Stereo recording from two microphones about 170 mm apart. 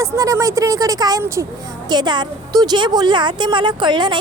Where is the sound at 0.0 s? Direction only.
20° right (ahead or behind).